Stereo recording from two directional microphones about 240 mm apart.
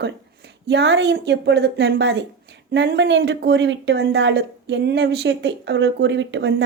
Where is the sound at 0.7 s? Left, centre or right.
Right.